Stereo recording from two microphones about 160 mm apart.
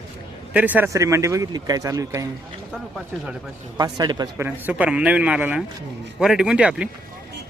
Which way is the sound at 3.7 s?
25° right (ahead or behind).